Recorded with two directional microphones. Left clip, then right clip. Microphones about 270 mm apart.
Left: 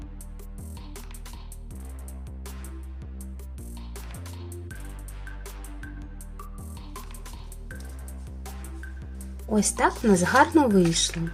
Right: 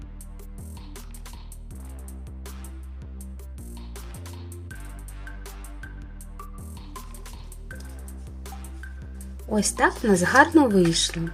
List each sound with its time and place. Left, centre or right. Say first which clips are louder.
0.5 s music: even; centre
3.2 s music: even; centre
5.8 s music: even; centre
9.1 s speech: even; centre